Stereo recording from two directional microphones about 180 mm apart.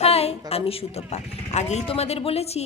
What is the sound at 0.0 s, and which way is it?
A woman's voice, 35° left (ahead or behind).